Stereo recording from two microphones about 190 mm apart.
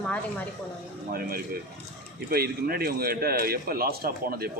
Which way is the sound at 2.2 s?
55° right (ahead or behind).